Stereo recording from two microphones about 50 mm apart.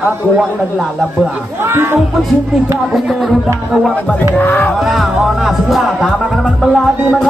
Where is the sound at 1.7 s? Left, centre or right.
Right.